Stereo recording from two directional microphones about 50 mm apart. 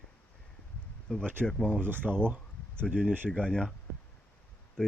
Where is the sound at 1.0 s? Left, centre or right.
Centre.